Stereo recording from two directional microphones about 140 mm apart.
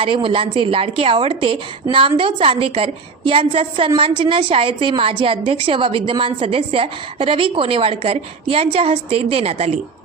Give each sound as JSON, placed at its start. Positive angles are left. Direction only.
{"t": 0.0, "sound": "a woman's voice", "side_deg": -40}